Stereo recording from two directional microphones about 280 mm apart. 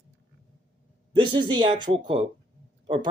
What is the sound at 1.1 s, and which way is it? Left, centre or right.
Speech, centre.